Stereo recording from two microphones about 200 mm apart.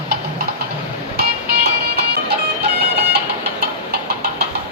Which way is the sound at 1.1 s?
55° right (ahead or behind).